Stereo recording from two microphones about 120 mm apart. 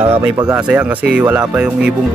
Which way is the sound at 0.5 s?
10° right (ahead or behind).